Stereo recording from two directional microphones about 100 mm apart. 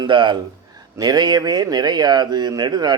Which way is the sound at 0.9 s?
40° right (ahead or behind).